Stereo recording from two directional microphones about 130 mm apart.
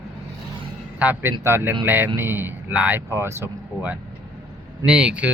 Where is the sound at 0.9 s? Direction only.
15° right (ahead or behind).